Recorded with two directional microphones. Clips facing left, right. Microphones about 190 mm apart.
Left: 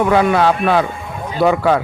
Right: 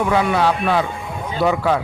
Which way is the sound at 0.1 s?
55° left (ahead or behind).